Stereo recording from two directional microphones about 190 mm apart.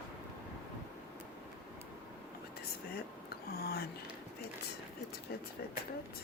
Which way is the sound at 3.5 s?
55° left (ahead or behind).